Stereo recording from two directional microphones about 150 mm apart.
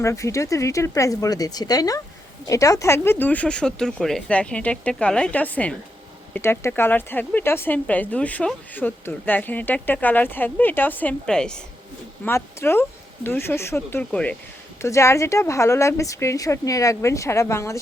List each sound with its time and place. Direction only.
0.0 s speech: 20° left (ahead or behind)
12.2 s speech: 15° left (ahead or behind)
14.8 s speech: 20° left (ahead or behind)